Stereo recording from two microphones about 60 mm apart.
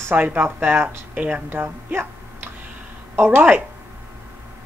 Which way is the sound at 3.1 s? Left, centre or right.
Right.